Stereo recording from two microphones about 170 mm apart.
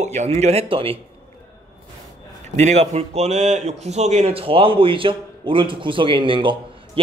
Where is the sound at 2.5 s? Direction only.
40° right (ahead or behind).